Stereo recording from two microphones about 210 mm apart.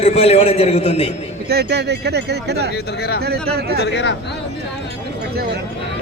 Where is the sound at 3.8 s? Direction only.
55° left (ahead or behind).